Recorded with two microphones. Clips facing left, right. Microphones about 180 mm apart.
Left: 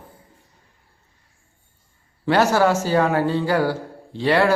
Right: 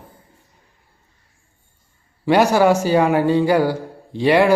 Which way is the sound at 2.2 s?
15° right (ahead or behind).